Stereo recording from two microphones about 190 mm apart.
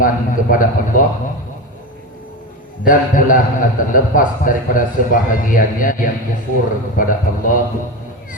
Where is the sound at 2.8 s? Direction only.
45° left (ahead or behind).